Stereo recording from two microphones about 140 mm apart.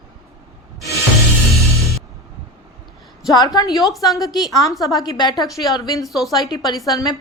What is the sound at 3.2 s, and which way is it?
Speech, 30° left (ahead or behind).